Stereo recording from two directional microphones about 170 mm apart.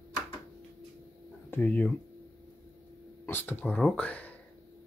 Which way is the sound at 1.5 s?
10° left (ahead or behind).